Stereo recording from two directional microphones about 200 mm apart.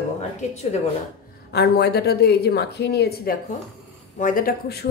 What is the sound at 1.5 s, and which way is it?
A woman's voice, 55° left (ahead or behind).